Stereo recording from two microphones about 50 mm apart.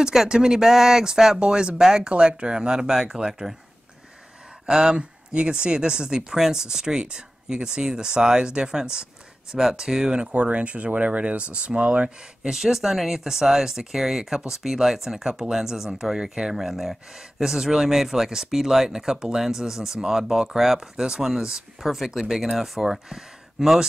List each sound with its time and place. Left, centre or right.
0.0 s speech: centre
4.6 s speech: centre
10.3 s speech: right
12.4 s speech: centre